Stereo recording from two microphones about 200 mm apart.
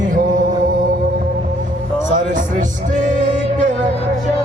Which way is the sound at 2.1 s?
40° right (ahead or behind).